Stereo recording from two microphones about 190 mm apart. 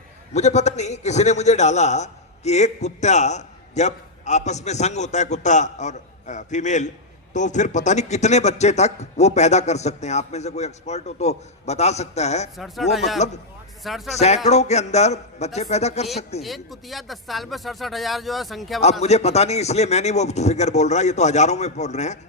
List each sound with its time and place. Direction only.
0.3 s a man's voice: 35° left (ahead or behind)
12.5 s speech: centre (ahead or behind)
13.1 s a man's voice: 35° left (ahead or behind)
13.8 s speech: centre (ahead or behind)
14.2 s a man's voice: 35° left (ahead or behind)
16.4 s speech: centre (ahead or behind)
19.0 s a man's voice: 35° left (ahead or behind)